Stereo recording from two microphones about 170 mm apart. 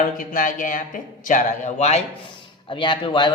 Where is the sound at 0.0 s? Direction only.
50° left (ahead or behind).